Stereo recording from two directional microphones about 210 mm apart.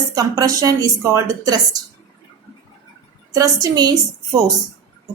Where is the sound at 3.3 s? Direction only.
15° right (ahead or behind).